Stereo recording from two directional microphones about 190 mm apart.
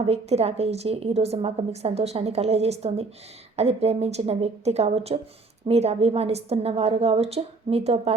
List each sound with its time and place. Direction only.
0.0 s a woman's voice: 35° right (ahead or behind)